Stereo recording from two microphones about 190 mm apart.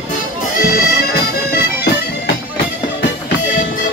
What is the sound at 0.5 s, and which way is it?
Accordion, 50° left (ahead or behind).